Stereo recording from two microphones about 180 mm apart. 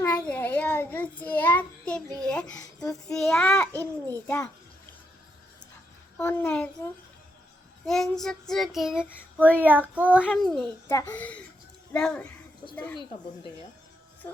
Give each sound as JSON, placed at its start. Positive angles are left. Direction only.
{"t": 0.0, "sound": "child singing", "side_deg": 5}
{"t": 6.1, "sound": "a child's voice", "side_deg": 10}
{"t": 7.9, "sound": "child singing", "side_deg": 0}
{"t": 10.2, "sound": "child singing", "side_deg": 5}
{"t": 10.8, "sound": "a child's voice", "side_deg": 10}
{"t": 11.9, "sound": "child singing", "side_deg": 5}
{"t": 13.0, "sound": "speech", "side_deg": 25}